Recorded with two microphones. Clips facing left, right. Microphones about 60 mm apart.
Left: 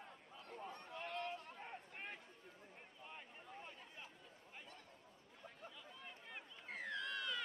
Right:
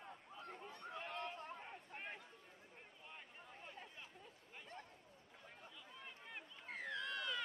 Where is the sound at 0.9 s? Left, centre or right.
Centre.